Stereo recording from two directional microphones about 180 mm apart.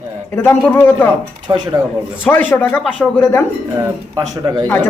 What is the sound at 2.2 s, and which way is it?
Speech, 10° left (ahead or behind).